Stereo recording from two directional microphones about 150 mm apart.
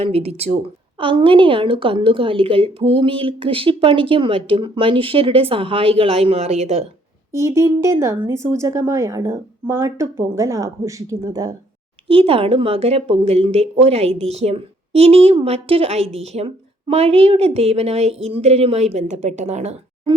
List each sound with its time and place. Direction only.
0.0 s a woman's voice: 40° right (ahead or behind)
7.3 s a woman's voice: 20° right (ahead or behind)
12.0 s speech: 40° right (ahead or behind)